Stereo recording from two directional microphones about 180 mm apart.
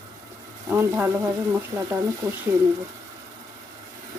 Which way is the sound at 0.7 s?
15° right (ahead or behind).